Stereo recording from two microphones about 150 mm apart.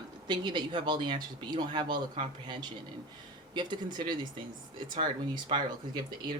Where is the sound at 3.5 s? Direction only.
30° right (ahead or behind).